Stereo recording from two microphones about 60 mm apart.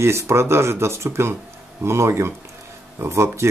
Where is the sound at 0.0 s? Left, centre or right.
Right.